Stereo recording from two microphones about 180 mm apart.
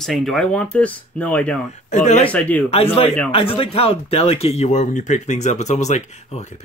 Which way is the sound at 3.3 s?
30° left (ahead or behind).